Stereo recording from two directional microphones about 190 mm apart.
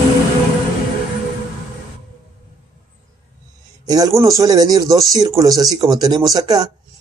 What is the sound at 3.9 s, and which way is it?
Speech, 20° right (ahead or behind).